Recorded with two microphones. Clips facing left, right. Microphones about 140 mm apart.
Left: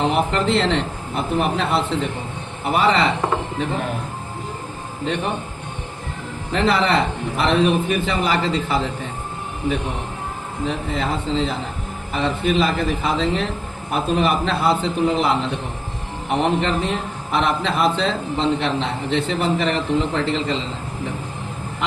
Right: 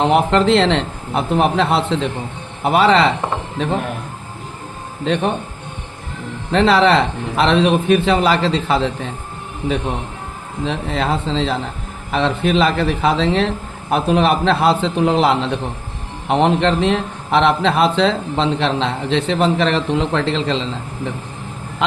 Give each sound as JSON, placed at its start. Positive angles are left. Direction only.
{"t": 0.1, "sound": "speech", "side_deg": -75}
{"t": 6.5, "sound": "a man's voice", "side_deg": -75}
{"t": 10.7, "sound": "a man's voice", "side_deg": -80}
{"t": 16.4, "sound": "a man's voice", "side_deg": -80}
{"t": 21.8, "sound": "speech", "side_deg": -90}